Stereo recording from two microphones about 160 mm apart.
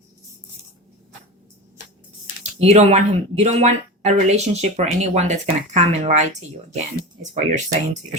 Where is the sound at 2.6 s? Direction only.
45° right (ahead or behind).